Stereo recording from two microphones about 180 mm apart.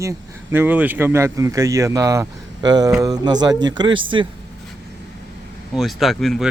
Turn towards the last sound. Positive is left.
turn(degrees=0)  # may be behind; listen again after turning